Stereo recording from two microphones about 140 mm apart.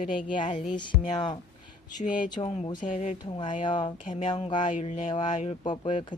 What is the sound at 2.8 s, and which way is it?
Speech, 65° left (ahead or behind).